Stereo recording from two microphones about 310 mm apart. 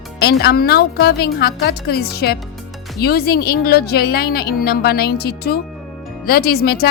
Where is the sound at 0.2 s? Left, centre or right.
Left.